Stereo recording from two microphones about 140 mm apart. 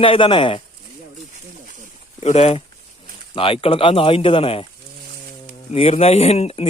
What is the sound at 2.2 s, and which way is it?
Speech, 50° left (ahead or behind).